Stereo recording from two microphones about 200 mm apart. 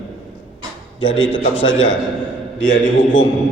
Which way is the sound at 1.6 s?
75° left (ahead or behind).